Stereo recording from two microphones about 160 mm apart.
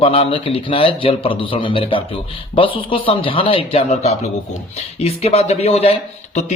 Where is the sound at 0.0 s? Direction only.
35° left (ahead or behind).